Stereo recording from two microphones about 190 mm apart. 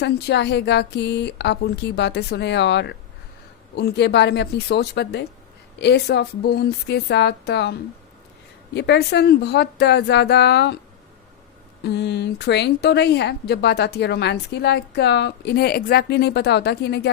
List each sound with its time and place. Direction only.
0.0 s speech: 65° left (ahead or behind)
11.8 s speech: 60° left (ahead or behind)